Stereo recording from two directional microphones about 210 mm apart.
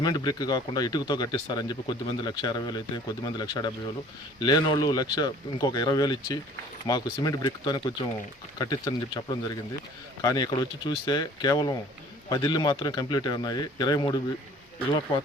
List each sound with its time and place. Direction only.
0.0 s speech: 20° left (ahead or behind)